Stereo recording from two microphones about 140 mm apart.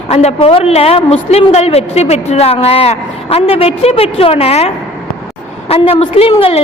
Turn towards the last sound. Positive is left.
turn(degrees=45)  # may be behind; listen again after turning